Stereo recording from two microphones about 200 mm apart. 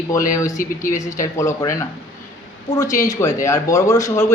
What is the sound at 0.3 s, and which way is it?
A woman's voice, 15° left (ahead or behind).